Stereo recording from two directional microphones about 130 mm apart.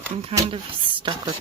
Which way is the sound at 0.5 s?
40° right (ahead or behind).